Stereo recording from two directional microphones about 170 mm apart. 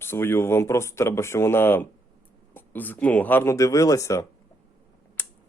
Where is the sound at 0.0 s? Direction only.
15° left (ahead or behind).